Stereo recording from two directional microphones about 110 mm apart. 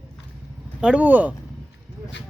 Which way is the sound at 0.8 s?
10° right (ahead or behind).